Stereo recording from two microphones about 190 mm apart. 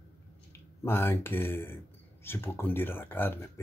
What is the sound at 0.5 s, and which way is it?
Speech, 10° left (ahead or behind).